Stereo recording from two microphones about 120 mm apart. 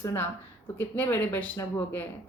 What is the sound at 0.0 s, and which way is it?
A woman's voice, 20° left (ahead or behind).